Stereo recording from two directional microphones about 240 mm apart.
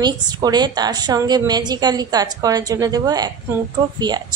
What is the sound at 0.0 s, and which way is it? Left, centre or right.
A woman's voice, centre.